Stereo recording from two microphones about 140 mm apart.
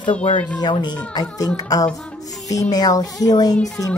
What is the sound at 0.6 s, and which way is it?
A woman's voice, 30° left (ahead or behind).